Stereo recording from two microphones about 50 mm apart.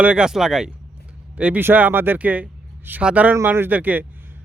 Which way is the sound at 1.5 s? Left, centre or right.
Right.